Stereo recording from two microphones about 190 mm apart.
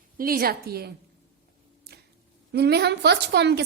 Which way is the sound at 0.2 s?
50° right (ahead or behind).